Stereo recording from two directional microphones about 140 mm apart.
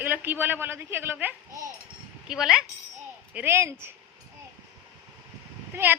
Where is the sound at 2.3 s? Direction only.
5° right (ahead or behind).